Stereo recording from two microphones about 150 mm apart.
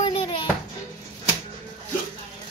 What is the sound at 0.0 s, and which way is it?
Music, 35° left (ahead or behind).